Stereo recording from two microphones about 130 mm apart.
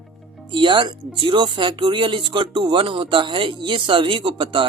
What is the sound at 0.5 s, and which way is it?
Speech, 40° right (ahead or behind).